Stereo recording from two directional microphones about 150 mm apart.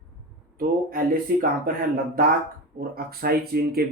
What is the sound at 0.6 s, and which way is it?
Speech, 70° right (ahead or behind).